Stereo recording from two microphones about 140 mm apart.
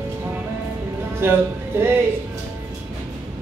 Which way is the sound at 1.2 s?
15° right (ahead or behind).